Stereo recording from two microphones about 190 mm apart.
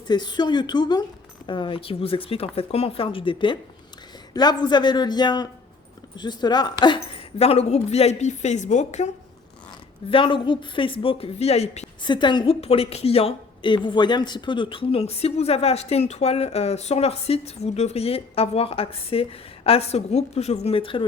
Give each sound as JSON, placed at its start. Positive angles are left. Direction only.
{"t": 0.1, "sound": "a woman's voice", "side_deg": 20}
{"t": 10.1, "sound": "speech", "side_deg": 25}
{"t": 12.0, "sound": "a woman's voice", "side_deg": 25}